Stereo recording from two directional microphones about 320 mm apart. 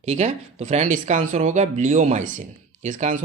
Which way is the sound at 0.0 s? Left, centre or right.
Right.